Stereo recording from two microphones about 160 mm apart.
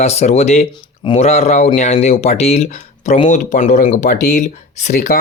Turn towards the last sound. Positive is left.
turn(degrees=55)  # may be behind; listen again after turning